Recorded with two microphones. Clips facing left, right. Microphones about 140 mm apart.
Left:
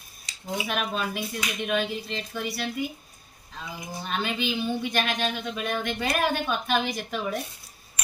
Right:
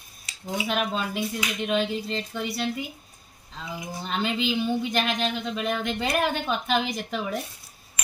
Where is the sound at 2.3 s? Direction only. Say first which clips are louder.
Left 1 dB; 25° right (ahead or behind).